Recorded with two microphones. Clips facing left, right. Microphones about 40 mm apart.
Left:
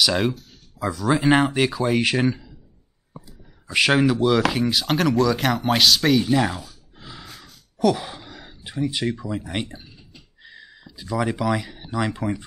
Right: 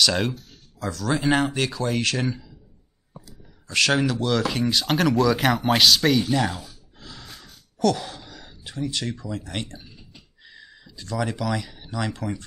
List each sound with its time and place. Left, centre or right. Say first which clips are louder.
0.0 s speech: left 2 dB; centre
3.6 s speech: left 3 dB; centre
7.0 s a sound: left 2 dB; centre
7.8 s speech: left 2 dB; centre